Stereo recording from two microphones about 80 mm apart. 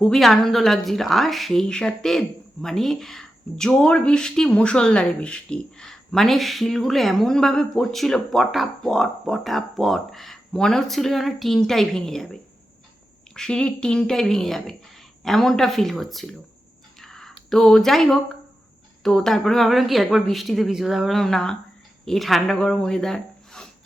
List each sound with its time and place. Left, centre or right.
0.0 s a woman's voice: centre
17.0 s a sound: centre
19.0 s a woman's voice: centre